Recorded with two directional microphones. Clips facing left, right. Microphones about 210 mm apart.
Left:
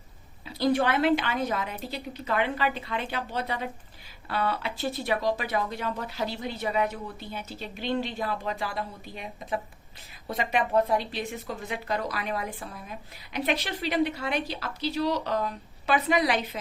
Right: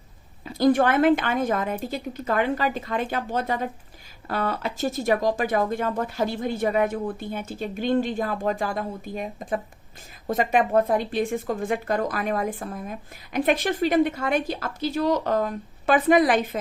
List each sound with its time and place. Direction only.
0.4 s a woman's voice: 50° right (ahead or behind)